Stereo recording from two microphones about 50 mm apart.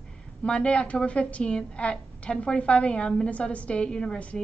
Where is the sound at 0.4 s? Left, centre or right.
Left.